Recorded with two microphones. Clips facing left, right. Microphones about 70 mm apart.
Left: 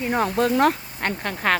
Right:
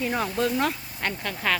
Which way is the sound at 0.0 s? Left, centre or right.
Left.